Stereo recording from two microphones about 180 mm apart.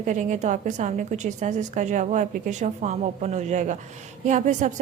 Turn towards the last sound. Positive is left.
turn(degrees=-45)  # may be behind; listen again after turning